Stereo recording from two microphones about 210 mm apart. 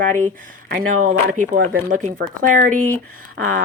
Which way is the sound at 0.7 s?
35° right (ahead or behind).